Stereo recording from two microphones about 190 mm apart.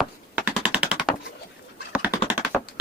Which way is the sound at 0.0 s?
5° right (ahead or behind).